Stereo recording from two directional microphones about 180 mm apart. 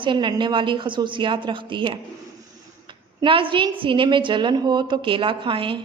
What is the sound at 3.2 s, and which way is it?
A woman's voice, 30° right (ahead or behind).